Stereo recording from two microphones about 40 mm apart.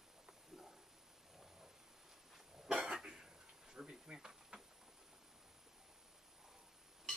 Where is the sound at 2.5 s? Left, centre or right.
Centre.